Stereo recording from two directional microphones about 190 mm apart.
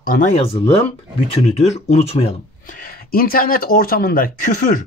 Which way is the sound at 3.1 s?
50° left (ahead or behind).